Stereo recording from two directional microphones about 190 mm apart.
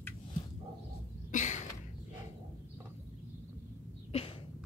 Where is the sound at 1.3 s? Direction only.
40° left (ahead or behind).